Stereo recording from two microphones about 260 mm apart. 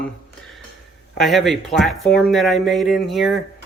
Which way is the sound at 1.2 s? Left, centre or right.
Centre.